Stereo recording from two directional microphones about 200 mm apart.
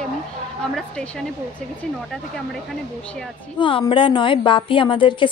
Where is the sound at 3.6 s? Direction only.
25° left (ahead or behind).